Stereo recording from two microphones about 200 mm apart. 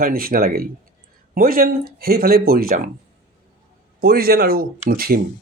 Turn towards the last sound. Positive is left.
turn(degrees=-50)  # may be behind; listen again after turning